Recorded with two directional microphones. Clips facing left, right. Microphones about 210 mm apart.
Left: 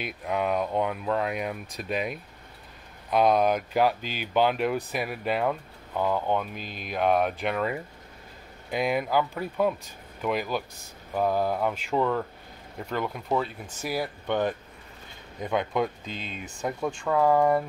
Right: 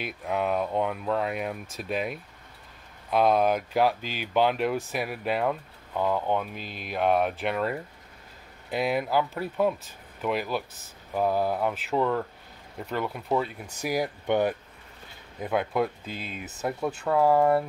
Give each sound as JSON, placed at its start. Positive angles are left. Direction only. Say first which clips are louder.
{"t": 0.0, "sound": "speech", "louder": "even", "side_deg": 0}
{"t": 6.6, "sound": "speech", "louder": "even", "side_deg": 40}
{"t": 6.9, "sound": "speech", "louder": "even", "side_deg": 0}